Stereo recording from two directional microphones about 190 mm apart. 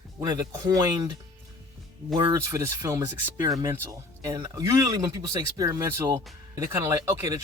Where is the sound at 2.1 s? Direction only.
20° right (ahead or behind).